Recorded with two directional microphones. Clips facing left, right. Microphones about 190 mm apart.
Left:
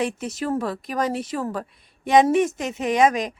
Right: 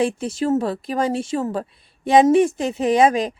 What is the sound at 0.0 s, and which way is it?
A woman's voice, 30° right (ahead or behind).